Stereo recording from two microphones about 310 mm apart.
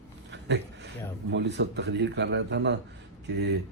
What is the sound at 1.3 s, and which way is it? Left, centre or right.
A man's voice, right.